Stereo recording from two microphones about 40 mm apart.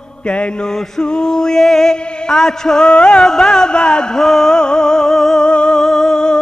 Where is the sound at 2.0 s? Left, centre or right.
Left.